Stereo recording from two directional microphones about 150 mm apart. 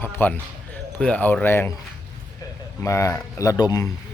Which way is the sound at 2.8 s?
20° left (ahead or behind).